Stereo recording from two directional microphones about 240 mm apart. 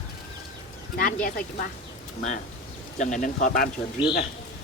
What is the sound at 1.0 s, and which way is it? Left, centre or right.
Speech, left.